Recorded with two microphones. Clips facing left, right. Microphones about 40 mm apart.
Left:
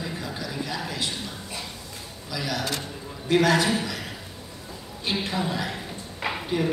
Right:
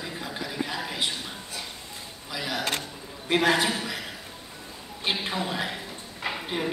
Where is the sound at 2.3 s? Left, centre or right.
Right.